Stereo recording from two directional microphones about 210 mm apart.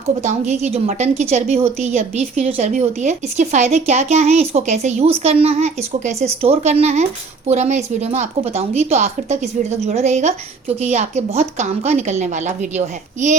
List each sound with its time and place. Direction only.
0.2 s a woman's voice: 35° right (ahead or behind)